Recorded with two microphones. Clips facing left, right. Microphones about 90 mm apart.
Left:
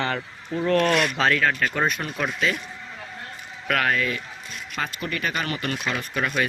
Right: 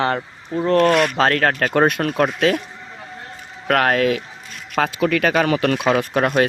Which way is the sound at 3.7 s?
60° right (ahead or behind).